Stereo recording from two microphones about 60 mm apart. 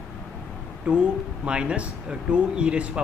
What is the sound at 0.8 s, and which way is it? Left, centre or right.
Speech, centre.